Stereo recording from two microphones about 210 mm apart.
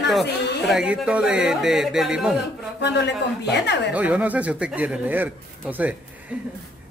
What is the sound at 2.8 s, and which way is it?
Speech, 55° left (ahead or behind).